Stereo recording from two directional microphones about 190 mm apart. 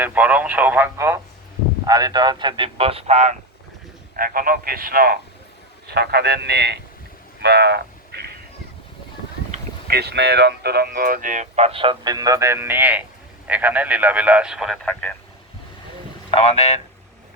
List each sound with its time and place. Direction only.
0.0 s speech: 5° right (ahead or behind); by 3.3 s 35° right (ahead or behind)
4.2 s a man's voice: 50° right (ahead or behind)
7.4 s vehicle: 60° right (ahead or behind)
9.8 s speech: 55° right (ahead or behind); by 15.1 s centre (ahead or behind)
16.3 s speech: 30° left (ahead or behind)